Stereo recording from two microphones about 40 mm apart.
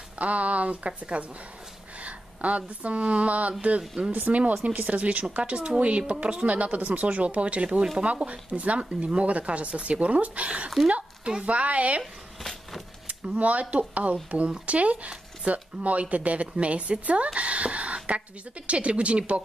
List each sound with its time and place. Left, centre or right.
0.2 s speech: right
3.8 s speech: centre
4.1 s speech: right
10.9 s a sound: right
11.4 s speech: right
12.0 s a sound: centre
13.4 s speech: right